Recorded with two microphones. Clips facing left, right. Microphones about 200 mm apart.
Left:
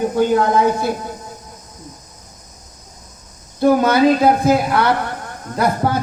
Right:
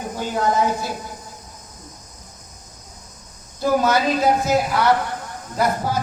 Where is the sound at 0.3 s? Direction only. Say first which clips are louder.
Left 5 dB; 60° left (ahead or behind).